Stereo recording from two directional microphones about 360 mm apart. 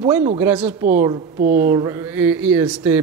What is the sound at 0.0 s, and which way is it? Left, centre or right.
Speech, centre.